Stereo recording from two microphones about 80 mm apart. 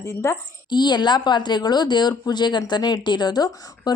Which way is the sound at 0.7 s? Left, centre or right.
Left.